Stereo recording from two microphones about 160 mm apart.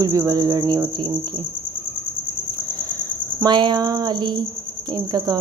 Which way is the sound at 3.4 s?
25° right (ahead or behind).